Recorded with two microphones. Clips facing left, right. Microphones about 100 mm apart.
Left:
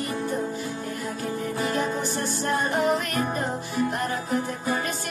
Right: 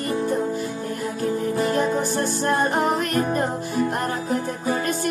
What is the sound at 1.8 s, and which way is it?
Music, 45° right (ahead or behind).